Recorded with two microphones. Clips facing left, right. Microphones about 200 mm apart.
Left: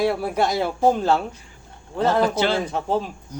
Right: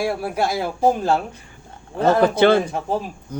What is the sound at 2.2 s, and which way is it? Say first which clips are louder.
Speech: right 6 dB; 55° right (ahead or behind).